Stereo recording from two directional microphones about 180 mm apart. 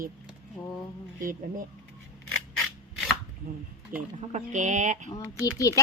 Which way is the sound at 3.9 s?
50° right (ahead or behind).